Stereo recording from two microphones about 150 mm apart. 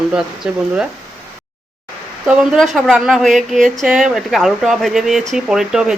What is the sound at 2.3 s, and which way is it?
Speech, centre (ahead or behind).